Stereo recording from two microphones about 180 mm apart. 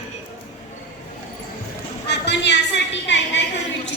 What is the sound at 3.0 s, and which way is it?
Speech, 90° left.